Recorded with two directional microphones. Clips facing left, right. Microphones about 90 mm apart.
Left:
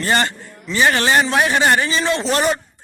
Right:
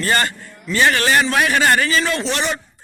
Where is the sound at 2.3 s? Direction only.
40° left (ahead or behind).